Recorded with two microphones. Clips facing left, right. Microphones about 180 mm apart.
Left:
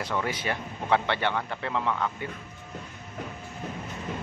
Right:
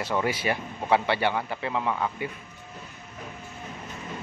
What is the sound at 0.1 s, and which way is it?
Speech, 10° right (ahead or behind).